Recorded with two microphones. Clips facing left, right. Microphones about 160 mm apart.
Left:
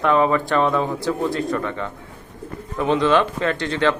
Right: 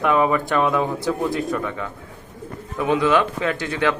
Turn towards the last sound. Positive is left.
turn(degrees=-10)  # may be behind; listen again after turning